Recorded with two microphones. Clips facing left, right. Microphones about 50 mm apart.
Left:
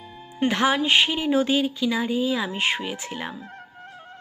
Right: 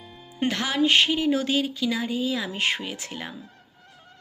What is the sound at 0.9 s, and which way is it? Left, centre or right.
Speech, centre.